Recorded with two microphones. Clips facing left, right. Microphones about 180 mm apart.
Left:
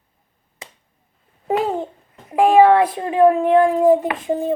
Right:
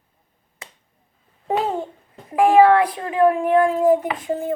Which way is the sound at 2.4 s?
25° left (ahead or behind).